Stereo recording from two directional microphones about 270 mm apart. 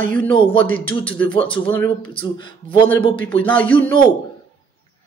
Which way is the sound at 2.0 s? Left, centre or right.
Centre.